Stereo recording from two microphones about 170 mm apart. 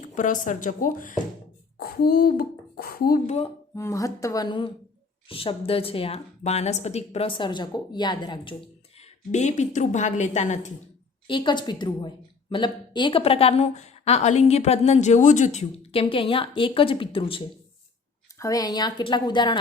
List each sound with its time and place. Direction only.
0.1 s a woman's voice: 50° left (ahead or behind)
1.8 s a child's voice: 65° left (ahead or behind)
3.2 s a woman's voice: 40° left (ahead or behind)
3.8 s a woman's voice: 15° left (ahead or behind)
9.0 s a woman's voice: 45° left (ahead or behind)
11.3 s a woman's voice: 30° left (ahead or behind)
18.3 s speech: 20° left (ahead or behind)